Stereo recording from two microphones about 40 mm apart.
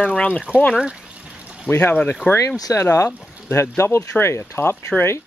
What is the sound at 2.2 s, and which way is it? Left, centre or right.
Speech, left.